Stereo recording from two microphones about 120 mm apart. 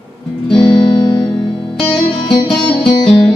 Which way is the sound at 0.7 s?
40° left (ahead or behind).